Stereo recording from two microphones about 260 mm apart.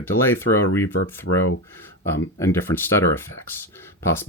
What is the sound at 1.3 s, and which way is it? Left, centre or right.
Speech, left.